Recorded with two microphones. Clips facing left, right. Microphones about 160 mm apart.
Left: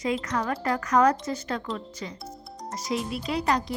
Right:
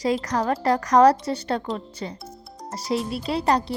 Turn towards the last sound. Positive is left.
turn(degrees=-30)  # may be behind; listen again after turning